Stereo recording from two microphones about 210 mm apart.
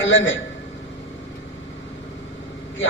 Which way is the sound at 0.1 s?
65° left (ahead or behind).